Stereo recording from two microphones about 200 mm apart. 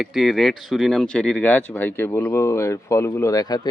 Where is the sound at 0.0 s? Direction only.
Centre (ahead or behind).